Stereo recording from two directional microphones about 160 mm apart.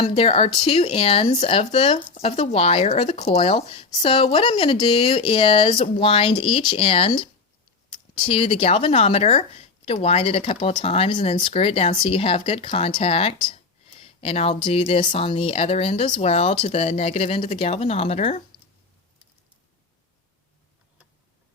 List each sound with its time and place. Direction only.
0.0 s a woman's voice: 40° left (ahead or behind)